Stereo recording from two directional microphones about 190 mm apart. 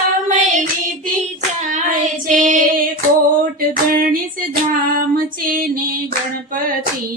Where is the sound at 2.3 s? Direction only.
45° right (ahead or behind).